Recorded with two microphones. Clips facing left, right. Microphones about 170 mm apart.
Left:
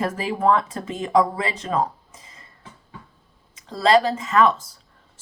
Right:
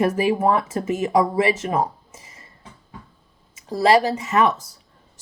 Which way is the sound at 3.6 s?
20° right (ahead or behind).